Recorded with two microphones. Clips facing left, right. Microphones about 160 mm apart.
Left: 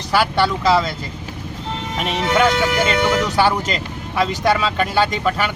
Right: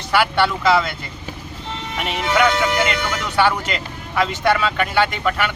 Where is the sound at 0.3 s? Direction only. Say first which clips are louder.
Left 1 dB; 35° left (ahead or behind).